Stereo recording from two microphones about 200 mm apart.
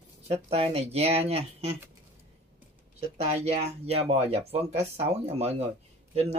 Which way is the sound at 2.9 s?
30° right (ahead or behind).